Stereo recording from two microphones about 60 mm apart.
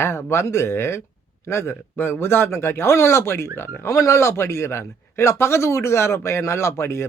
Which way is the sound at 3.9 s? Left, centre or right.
Left.